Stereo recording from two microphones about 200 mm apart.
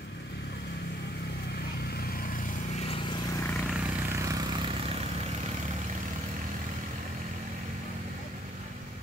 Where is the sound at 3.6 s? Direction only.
10° right (ahead or behind).